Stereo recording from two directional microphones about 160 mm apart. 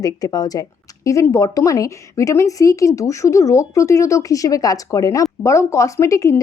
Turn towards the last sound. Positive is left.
turn(degrees=20)  # may be behind; listen again after turning